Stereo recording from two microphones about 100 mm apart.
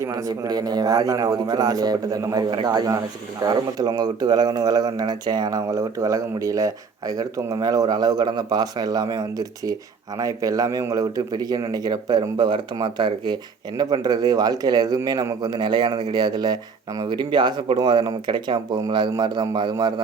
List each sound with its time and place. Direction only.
0.0 s speech: 35° right (ahead or behind)